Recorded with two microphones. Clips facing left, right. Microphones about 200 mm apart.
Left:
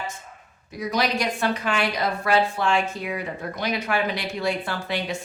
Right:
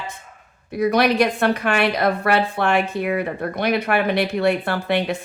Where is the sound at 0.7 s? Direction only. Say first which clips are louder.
Right 7 dB; 60° right (ahead or behind).